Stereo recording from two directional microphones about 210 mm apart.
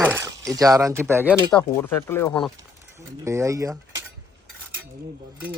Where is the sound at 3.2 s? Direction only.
15° right (ahead or behind).